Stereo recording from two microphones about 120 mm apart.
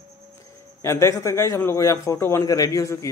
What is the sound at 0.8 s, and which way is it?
A man's voice, 25° left (ahead or behind).